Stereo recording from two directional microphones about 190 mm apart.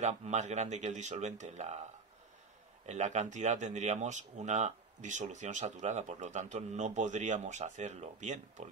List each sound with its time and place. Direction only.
0.0 s speech: 35° right (ahead or behind)
2.9 s speech: 40° right (ahead or behind)